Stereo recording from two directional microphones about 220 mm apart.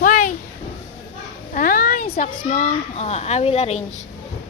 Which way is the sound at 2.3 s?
35° left (ahead or behind).